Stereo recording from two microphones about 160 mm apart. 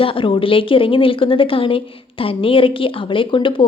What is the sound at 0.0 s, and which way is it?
Speech, 35° left (ahead or behind).